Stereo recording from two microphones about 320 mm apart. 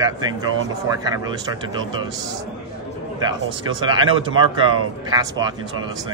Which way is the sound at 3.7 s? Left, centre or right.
Centre.